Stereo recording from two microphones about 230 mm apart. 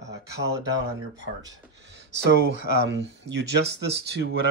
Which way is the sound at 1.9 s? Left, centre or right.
Right.